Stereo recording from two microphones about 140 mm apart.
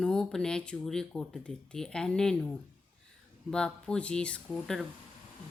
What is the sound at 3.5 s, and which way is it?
Speech, 5° left (ahead or behind).